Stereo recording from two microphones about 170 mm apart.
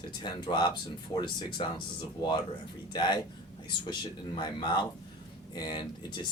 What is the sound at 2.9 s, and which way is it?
Speech, 25° left (ahead or behind).